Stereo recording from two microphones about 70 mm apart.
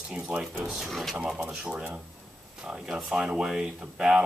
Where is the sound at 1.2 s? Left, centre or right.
Centre.